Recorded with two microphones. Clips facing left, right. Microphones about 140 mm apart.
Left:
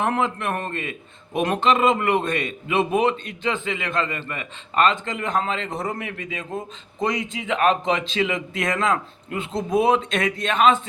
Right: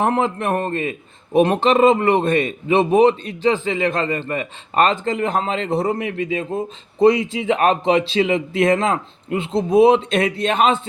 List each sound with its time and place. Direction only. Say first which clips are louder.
0.0 s a man's voice: right 4 dB; 35° right (ahead or behind)